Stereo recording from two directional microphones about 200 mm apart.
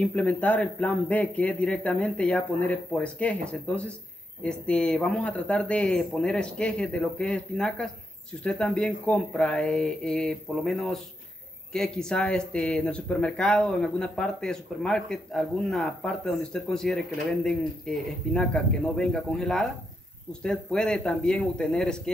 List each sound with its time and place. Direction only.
0.0 s a man's voice: 5° left (ahead or behind)